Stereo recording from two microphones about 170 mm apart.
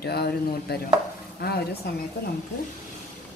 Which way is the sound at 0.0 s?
70° left (ahead or behind).